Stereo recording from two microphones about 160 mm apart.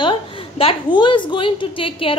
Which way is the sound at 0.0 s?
30° left (ahead or behind).